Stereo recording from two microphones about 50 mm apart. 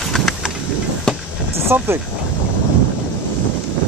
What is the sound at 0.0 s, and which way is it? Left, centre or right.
Vehicle, centre.